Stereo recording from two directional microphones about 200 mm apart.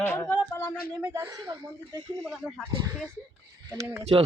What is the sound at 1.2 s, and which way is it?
Speech, 25° right (ahead or behind).